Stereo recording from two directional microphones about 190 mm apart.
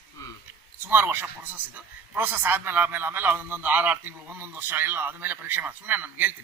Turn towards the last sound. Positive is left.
turn(degrees=-10)  # may be behind; listen again after turning